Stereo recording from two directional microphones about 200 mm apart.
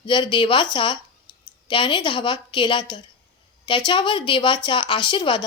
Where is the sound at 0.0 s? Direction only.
25° left (ahead or behind).